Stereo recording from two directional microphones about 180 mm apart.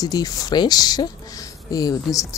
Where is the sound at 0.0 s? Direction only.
20° left (ahead or behind).